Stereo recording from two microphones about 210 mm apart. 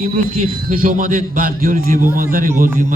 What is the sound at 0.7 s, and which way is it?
A man's voice, 40° right (ahead or behind).